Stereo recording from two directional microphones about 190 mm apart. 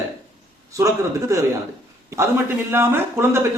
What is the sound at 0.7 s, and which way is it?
Speech, 15° right (ahead or behind).